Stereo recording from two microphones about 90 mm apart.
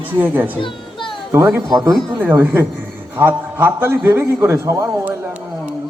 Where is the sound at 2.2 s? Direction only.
20° right (ahead or behind).